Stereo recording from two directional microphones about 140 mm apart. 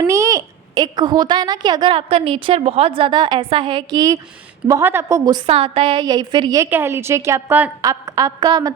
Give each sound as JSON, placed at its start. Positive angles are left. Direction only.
{"t": 0.0, "sound": "a child's voice", "side_deg": -25}
{"t": 5.5, "sound": "a child's voice", "side_deg": -45}
{"t": 6.6, "sound": "a woman's voice", "side_deg": -15}